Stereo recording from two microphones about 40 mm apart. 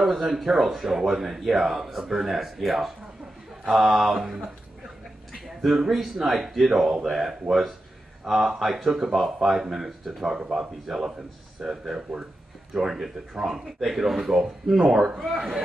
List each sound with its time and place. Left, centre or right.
0.0 s speech: centre
4.2 s speech: centre
5.3 s a sound: centre
6.2 s speech: centre
6.7 s speech: centre